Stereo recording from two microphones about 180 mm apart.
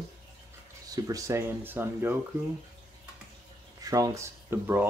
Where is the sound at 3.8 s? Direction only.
20° right (ahead or behind).